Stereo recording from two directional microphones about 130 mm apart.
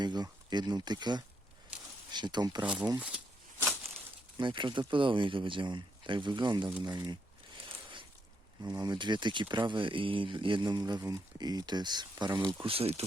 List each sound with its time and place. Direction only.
0.0 s speech: 35° right (ahead or behind)
4.4 s speech: 40° right (ahead or behind)
6.8 s a sound: 35° right (ahead or behind)
8.6 s speech: 30° right (ahead or behind)
12.6 s speech: 50° right (ahead or behind)